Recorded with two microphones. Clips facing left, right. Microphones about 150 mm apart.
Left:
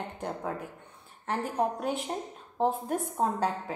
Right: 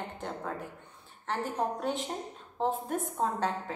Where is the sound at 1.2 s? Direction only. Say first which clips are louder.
Left 3 dB; 5° left (ahead or behind).